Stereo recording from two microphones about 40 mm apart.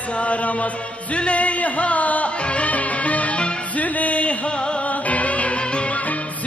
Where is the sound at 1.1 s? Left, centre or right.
Left.